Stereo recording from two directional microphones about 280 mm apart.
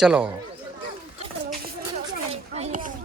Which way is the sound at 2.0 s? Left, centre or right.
Right.